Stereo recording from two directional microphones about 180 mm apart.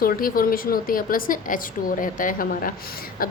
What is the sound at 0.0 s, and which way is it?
A woman's voice, 55° left (ahead or behind).